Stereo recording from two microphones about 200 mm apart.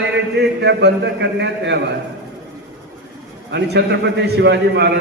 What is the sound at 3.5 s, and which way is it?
A man's voice, 60° right (ahead or behind).